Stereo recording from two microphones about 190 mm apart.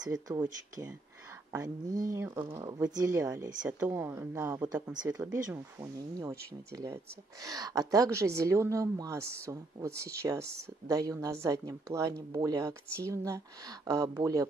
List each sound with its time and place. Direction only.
0.0 s a woman's voice: 20° right (ahead or behind)